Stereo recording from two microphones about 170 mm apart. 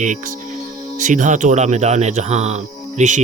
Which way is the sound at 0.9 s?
50° right (ahead or behind).